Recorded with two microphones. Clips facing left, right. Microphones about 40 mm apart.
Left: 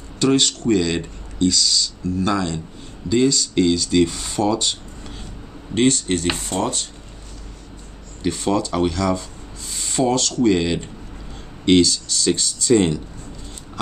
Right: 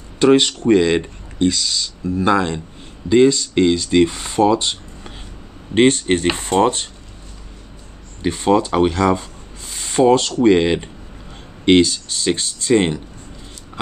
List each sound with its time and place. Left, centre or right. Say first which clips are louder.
0.2 s speech: right 5 dB; right
8.2 s speech: right 5 dB; right